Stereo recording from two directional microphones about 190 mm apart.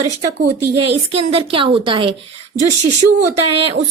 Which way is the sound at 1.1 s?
30° right (ahead or behind).